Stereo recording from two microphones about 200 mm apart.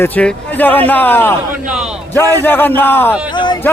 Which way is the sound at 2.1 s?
10° left (ahead or behind).